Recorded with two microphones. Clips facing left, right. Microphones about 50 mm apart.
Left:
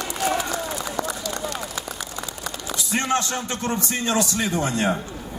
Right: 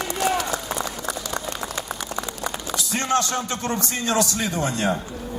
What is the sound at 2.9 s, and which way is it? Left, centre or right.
A man's voice, left.